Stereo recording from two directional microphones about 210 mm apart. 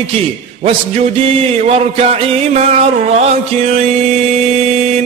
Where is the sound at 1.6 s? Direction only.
30° right (ahead or behind).